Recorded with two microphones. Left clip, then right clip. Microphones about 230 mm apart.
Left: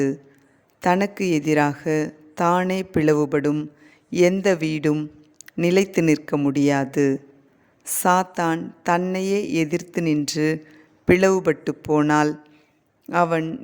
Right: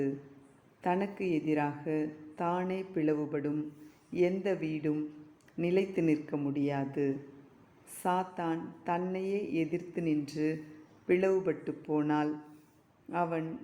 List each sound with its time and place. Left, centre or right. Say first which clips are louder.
0.8 s speech: left 12 dB; left